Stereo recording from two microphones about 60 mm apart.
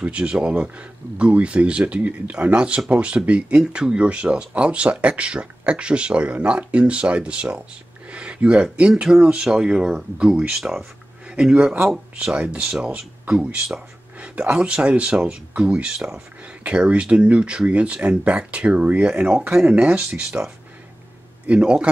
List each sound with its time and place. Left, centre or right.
0.0 s speech: centre
10.6 s speech: centre
12.4 s speech: centre